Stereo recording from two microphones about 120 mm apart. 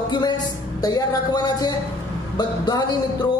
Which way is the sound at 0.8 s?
35° left (ahead or behind).